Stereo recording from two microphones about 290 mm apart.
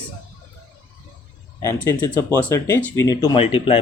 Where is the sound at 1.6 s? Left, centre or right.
Centre.